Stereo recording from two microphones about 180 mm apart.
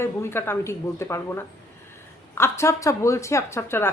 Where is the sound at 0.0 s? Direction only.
15° left (ahead or behind).